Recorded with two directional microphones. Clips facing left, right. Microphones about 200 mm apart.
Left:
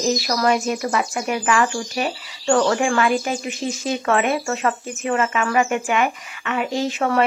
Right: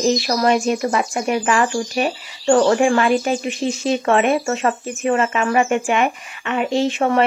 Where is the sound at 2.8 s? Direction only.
25° right (ahead or behind).